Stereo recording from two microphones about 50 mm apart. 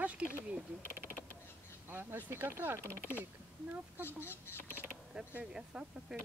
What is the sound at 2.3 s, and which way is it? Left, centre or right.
Speech, right.